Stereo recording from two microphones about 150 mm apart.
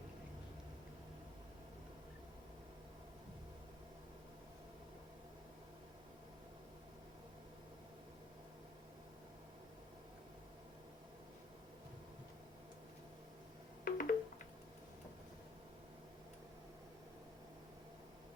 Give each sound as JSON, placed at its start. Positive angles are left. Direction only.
{"t": 13.8, "sound": "music", "side_deg": 75}